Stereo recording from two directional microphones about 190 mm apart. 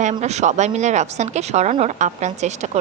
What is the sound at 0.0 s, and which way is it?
Speech, 35° right (ahead or behind).